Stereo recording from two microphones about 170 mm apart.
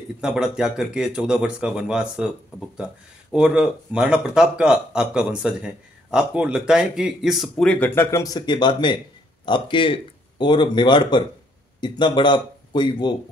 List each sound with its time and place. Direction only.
0.2 s speech: 5° right (ahead or behind); by 13.1 s 25° left (ahead or behind)